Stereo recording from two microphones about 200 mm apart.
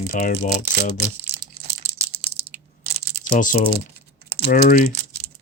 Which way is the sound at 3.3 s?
45° left (ahead or behind).